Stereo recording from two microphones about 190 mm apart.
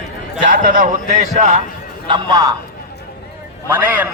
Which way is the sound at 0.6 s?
40° right (ahead or behind).